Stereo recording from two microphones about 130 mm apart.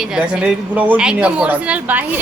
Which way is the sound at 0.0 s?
5° right (ahead or behind).